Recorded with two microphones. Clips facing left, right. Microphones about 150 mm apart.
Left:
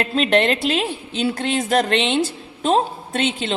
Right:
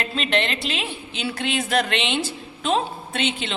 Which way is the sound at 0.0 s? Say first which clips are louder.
Left 7 dB; 45° left (ahead or behind).